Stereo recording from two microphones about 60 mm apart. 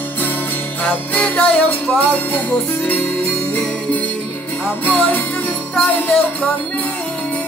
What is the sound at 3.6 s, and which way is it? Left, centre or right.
Music, left.